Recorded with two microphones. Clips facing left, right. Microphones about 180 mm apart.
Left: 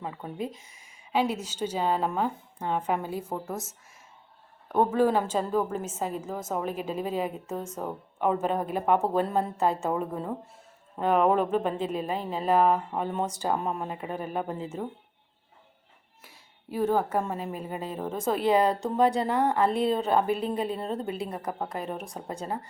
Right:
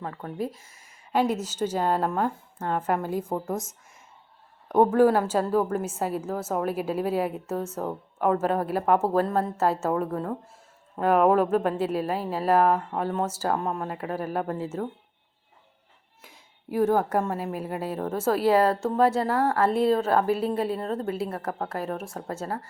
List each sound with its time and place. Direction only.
0.0 s speech: 10° left (ahead or behind)
1.6 s a woman's voice: 10° right (ahead or behind)
2.0 s speech: 10° left (ahead or behind)
2.7 s a woman's voice: 5° right (ahead or behind)
3.4 s a woman's voice: 5° left (ahead or behind)
4.9 s a woman's voice: 10° right (ahead or behind)
10.1 s speech: 5° left (ahead or behind)
10.9 s a woman's voice: 5° right (ahead or behind)
16.2 s a sound: 15° right (ahead or behind)
17.1 s a woman's voice: 10° right (ahead or behind)
22.4 s speech: 15° left (ahead or behind)